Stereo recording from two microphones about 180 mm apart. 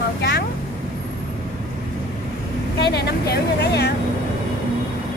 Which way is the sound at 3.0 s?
60° left (ahead or behind).